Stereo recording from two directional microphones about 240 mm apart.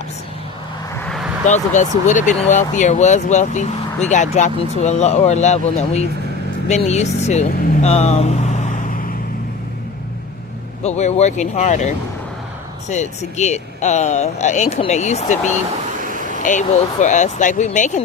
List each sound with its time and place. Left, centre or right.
1.0 s vehicle: centre
1.5 s speech: left
10.8 s speech: left
16.0 s vehicle: right
16.4 s speech: left